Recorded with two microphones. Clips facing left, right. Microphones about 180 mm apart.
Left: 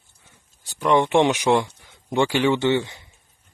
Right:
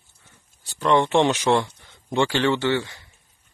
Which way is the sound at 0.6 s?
15° left (ahead or behind).